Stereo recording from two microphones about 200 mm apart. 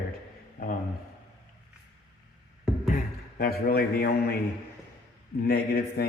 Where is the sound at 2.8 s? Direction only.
45° left (ahead or behind).